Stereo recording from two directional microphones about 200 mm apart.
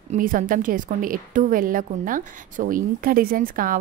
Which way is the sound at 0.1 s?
40° right (ahead or behind).